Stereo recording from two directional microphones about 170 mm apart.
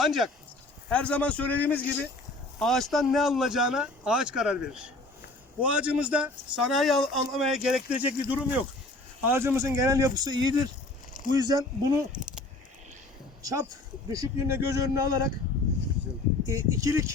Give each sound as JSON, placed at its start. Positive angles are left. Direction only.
{"t": 0.0, "sound": "a man's voice", "side_deg": 0}
{"t": 12.1, "sound": "keys jangling", "side_deg": -5}
{"t": 13.4, "sound": "speech", "side_deg": -20}
{"t": 16.5, "sound": "speech", "side_deg": -20}